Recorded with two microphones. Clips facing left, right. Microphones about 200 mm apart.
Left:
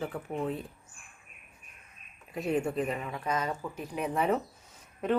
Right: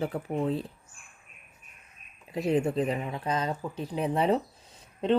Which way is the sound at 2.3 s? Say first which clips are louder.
Right 4 dB; 35° right (ahead or behind).